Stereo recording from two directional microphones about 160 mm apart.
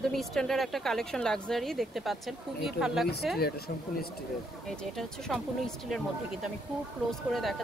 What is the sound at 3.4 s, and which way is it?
Speech, 75° left (ahead or behind).